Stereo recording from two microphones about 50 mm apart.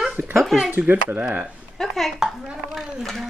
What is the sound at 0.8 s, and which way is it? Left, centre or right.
Speech, right.